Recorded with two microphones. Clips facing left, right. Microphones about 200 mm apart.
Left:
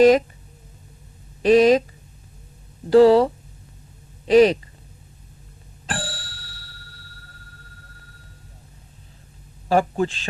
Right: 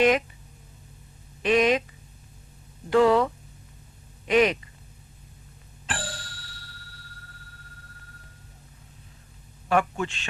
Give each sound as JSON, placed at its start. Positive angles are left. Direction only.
{"t": 0.0, "sound": "a man's voice", "side_deg": 35}
{"t": 1.4, "sound": "speech", "side_deg": 35}
{"t": 2.9, "sound": "a man's voice", "side_deg": 35}
{"t": 5.8, "sound": "a sound", "side_deg": 35}
{"t": 9.6, "sound": "a man's voice", "side_deg": 35}